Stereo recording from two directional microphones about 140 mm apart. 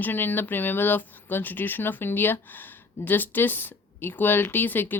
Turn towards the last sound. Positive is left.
turn(degrees=15)  # may be behind; listen again after turning